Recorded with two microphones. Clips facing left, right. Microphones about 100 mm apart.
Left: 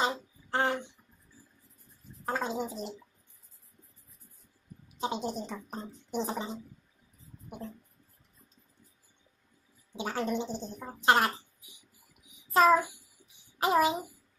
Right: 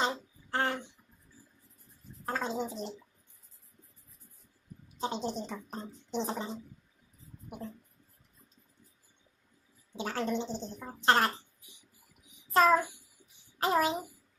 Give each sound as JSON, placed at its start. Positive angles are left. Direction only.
{"t": 0.5, "sound": "a sound", "side_deg": 15}
{"t": 2.2, "sound": "speech", "side_deg": 15}
{"t": 5.0, "sound": "speech", "side_deg": 10}
{"t": 7.4, "sound": "speech", "side_deg": -5}
{"t": 9.9, "sound": "speech", "side_deg": 15}
{"t": 12.5, "sound": "a child's voice", "side_deg": 10}